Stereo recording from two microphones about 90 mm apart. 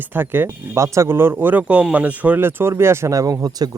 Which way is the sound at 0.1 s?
20° right (ahead or behind).